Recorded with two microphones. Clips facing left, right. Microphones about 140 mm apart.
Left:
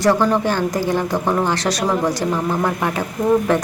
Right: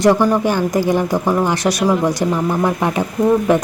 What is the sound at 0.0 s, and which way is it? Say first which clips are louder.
A woman's voice: right 3 dB; 15° right (ahead or behind).